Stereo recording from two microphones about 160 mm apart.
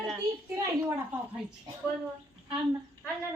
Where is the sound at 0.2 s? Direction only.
20° right (ahead or behind).